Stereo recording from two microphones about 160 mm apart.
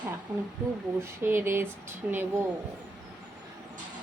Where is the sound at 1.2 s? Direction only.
15° right (ahead or behind).